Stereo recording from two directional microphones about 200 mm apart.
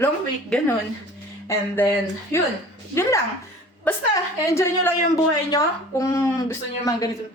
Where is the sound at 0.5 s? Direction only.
5° left (ahead or behind).